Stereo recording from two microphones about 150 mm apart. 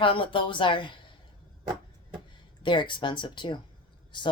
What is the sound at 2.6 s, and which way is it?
Speech, 30° left (ahead or behind).